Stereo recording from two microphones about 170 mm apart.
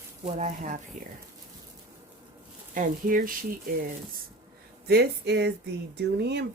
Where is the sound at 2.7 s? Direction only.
50° right (ahead or behind).